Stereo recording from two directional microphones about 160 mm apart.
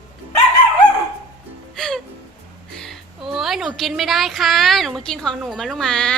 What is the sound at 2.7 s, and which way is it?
A woman's voice, centre (ahead or behind).